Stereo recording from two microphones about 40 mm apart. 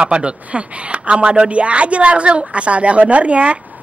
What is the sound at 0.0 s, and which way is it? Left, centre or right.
Speech, right.